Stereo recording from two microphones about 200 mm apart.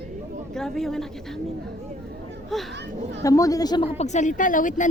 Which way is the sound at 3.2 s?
15° left (ahead or behind).